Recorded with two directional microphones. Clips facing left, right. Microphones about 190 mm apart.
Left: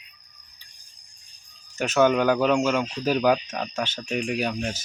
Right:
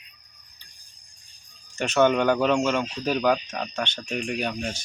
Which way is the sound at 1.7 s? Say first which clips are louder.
Even; 5° left (ahead or behind).